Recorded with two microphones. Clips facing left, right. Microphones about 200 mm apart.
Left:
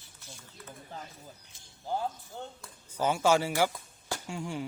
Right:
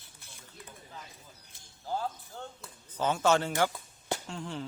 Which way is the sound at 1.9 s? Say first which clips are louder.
Left 1 dB; 15° left (ahead or behind).